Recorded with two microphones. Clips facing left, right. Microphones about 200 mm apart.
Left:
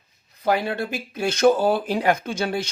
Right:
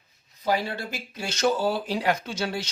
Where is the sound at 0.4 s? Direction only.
55° left (ahead or behind).